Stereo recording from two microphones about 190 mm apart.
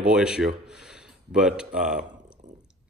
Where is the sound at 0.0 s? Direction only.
5° right (ahead or behind).